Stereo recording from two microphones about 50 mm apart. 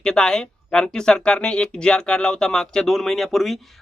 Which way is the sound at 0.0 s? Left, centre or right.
Centre.